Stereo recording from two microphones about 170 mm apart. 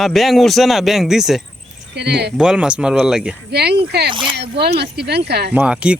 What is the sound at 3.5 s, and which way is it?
Speech, 75° right (ahead or behind).